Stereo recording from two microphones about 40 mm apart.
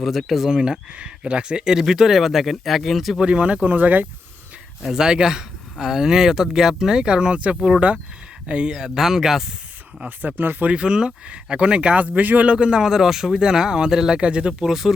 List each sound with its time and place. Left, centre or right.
0.0 s speech: centre
0.5 s speech: right; by 3.2 s centre
3.2 s speech: right
4.9 s speech: centre
8.4 s speech: right
10.2 s speech: right
10.7 s speech: right
11.9 s speech: right
12.5 s speech: right
12.9 s speech: centre
14.2 s speech: right
14.6 s speech: centre